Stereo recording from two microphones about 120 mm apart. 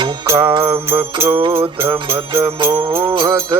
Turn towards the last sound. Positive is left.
turn(degrees=-45)  # may be behind; listen again after turning